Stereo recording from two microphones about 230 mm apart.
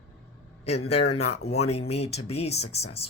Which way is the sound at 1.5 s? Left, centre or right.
Left.